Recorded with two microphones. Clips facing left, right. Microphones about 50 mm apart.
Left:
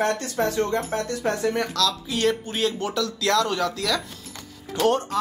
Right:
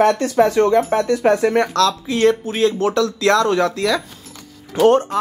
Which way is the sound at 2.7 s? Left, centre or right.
Right.